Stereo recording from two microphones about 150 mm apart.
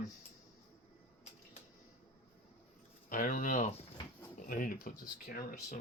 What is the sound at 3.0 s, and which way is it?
Speech, 65° left (ahead or behind).